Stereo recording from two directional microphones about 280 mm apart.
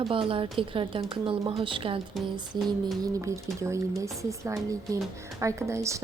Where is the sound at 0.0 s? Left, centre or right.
Centre.